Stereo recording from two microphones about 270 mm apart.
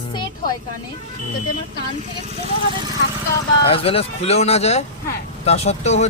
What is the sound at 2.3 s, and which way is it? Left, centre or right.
Speech, centre.